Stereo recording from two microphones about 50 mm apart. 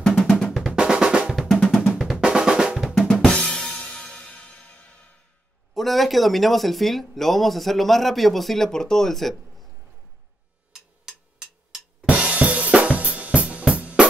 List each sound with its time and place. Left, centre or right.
0.2 s drum: centre
0.5 s drum: centre
1.5 s drum: centre
2.1 s drum: centre
2.9 s drum kit: centre
5.8 s speech: centre
10.7 s a sound: centre
12.1 s drum kit: right